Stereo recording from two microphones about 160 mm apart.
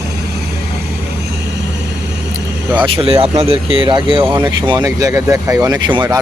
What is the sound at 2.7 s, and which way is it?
Speech, 35° right (ahead or behind).